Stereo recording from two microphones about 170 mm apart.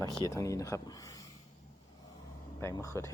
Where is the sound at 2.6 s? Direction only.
20° left (ahead or behind).